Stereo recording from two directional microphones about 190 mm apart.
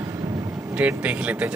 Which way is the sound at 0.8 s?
5° right (ahead or behind).